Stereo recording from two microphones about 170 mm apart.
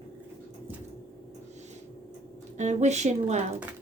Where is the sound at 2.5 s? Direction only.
45° right (ahead or behind).